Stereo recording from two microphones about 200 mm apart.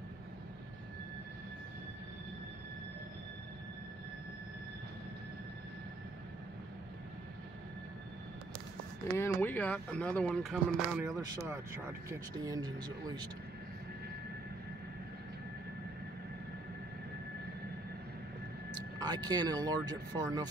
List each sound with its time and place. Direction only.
9.1 s speech: 10° left (ahead or behind); by 13.3 s 20° right (ahead or behind)
18.9 s speech: 20° right (ahead or behind)